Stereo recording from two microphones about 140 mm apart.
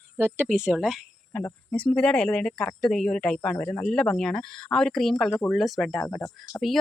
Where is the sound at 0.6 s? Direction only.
5° right (ahead or behind).